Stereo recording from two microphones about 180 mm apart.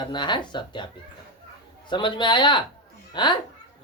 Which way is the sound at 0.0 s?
25° left (ahead or behind).